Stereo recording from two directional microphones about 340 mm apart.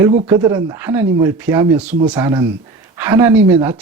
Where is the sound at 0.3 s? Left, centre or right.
Centre.